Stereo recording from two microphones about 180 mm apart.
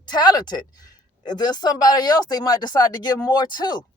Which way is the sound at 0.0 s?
25° left (ahead or behind).